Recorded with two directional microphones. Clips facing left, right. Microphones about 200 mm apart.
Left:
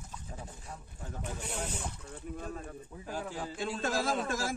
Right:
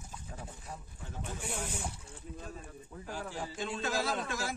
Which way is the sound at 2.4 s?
55° left (ahead or behind).